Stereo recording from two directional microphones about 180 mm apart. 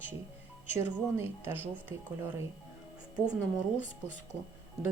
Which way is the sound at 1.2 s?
10° right (ahead or behind).